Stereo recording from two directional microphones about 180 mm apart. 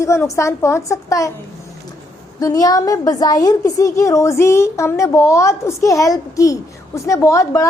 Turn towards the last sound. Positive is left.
turn(degrees=15)  # may be behind; listen again after turning